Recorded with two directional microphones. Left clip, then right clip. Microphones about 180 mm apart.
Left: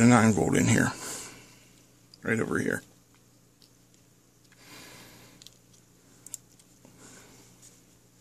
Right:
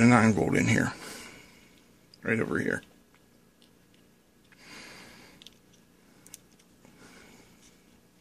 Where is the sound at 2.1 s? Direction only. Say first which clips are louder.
Even; 10° left (ahead or behind).